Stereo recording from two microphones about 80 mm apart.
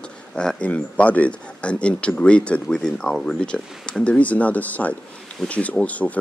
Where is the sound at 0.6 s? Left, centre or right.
Centre.